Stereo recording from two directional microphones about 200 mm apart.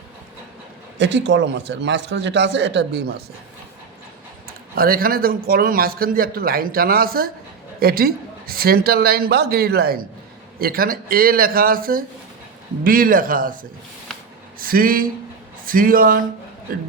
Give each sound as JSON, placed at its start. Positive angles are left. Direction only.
{"t": 0.9, "sound": "a man's voice", "side_deg": -60}
{"t": 4.7, "sound": "speech", "side_deg": -45}